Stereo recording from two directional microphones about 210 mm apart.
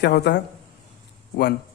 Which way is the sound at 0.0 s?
55° left (ahead or behind).